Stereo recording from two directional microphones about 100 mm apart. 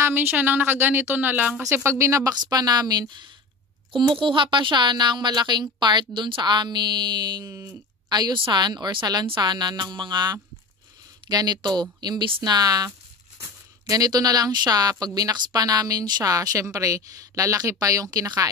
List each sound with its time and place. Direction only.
0.0 s speech: 20° right (ahead or behind)
1.6 s a woman's voice: 30° right (ahead or behind)